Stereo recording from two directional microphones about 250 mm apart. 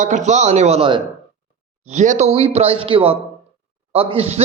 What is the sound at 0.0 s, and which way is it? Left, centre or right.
A man's voice, right.